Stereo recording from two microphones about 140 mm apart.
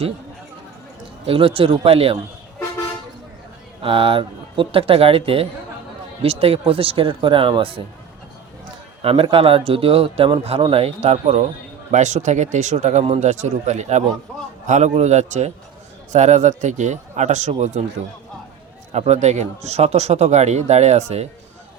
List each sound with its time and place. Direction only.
1.3 s speech: 40° right (ahead or behind)
3.8 s speech: 40° right (ahead or behind)
9.0 s speech: 40° right (ahead or behind)
18.9 s speech: 50° right (ahead or behind)